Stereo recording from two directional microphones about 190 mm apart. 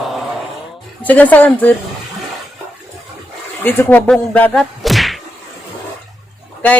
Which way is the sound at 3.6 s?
10° left (ahead or behind).